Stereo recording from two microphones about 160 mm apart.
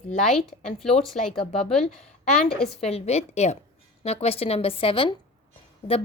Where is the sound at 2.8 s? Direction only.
40° left (ahead or behind).